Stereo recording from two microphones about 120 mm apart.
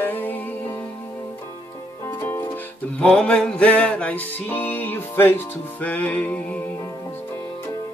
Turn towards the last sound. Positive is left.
turn(degrees=10)  # may be behind; listen again after turning